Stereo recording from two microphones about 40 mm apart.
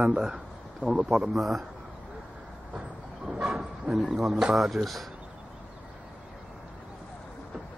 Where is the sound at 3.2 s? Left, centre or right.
Centre.